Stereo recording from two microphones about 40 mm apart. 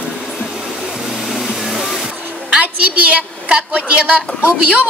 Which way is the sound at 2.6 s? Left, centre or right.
Right.